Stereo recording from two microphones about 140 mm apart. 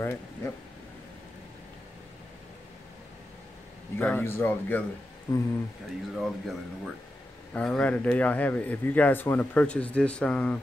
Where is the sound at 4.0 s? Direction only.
15° left (ahead or behind).